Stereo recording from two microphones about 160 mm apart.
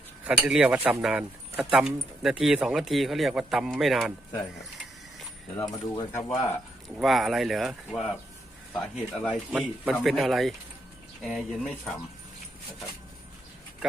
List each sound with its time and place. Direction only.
0.3 s speech: 5° right (ahead or behind)
5.7 s speech: 25° left (ahead or behind)
6.9 s speech: centre (ahead or behind)
9.5 s speech: 10° right (ahead or behind)